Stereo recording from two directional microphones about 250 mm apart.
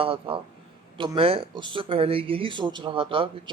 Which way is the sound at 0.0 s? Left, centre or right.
Right.